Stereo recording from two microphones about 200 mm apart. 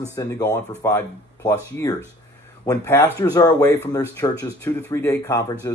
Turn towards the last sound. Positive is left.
turn(degrees=15)  # may be behind; listen again after turning